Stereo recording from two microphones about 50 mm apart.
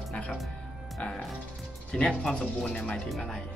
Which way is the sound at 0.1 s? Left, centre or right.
Left.